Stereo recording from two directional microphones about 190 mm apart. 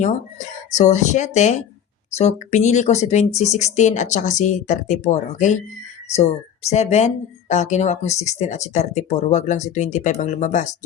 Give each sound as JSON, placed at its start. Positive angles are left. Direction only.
{"t": 0.7, "sound": "speech", "side_deg": 40}